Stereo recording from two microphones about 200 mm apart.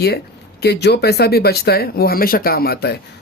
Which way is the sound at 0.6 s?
55° left (ahead or behind).